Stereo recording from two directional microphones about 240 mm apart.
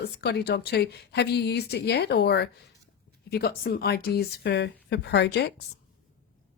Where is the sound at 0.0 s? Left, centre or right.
Left.